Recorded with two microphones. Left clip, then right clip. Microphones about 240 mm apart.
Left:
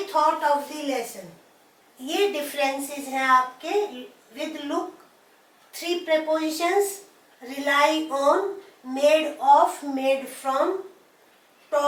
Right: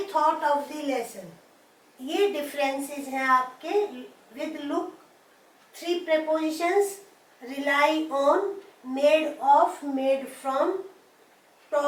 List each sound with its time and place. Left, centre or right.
0.0 s a woman's voice: centre
2.0 s a woman's voice: centre
4.4 s a woman's voice: centre
5.8 s a woman's voice: centre
8.1 s a woman's voice: centre
9.0 s a woman's voice: centre